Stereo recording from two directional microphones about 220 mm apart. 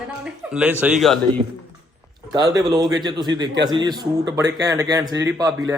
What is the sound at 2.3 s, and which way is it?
Speech, 20° right (ahead or behind).